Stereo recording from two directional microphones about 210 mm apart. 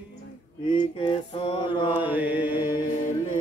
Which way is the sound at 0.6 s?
25° left (ahead or behind).